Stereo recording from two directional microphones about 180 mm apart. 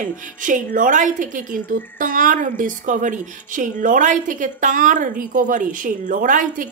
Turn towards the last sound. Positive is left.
turn(degrees=-45)  # may be behind; listen again after turning